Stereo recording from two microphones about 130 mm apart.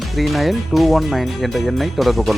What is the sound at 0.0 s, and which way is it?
Speech, centre (ahead or behind).